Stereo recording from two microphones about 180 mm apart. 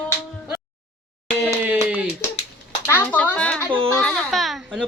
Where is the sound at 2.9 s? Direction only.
10° left (ahead or behind).